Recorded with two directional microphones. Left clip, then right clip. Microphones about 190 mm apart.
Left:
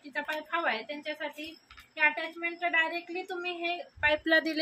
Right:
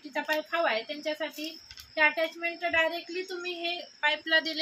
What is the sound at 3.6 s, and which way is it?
Speech, 55° left (ahead or behind).